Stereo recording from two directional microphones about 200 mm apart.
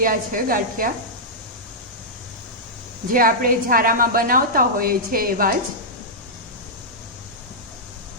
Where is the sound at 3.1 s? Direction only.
45° right (ahead or behind).